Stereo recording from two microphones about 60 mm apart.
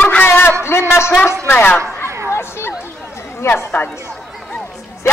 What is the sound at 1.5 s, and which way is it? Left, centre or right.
Chatter, left.